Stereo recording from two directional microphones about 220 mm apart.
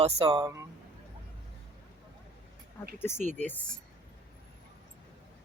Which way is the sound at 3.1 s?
35° right (ahead or behind).